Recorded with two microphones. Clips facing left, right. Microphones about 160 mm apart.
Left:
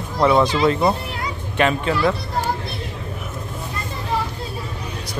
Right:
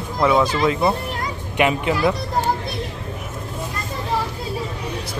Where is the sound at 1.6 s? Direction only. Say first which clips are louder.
Even; 15° right (ahead or behind).